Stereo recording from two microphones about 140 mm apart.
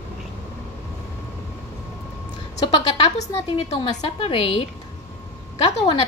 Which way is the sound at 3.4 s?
40° left (ahead or behind).